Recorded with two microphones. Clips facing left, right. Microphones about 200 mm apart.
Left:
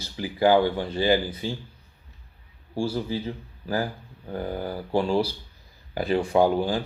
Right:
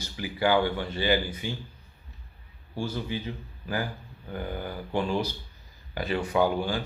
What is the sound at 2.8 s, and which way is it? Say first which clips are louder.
Speech: left 5 dB; 35° left (ahead or behind).